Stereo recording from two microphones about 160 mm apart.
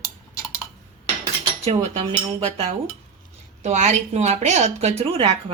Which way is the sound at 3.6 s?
50° right (ahead or behind).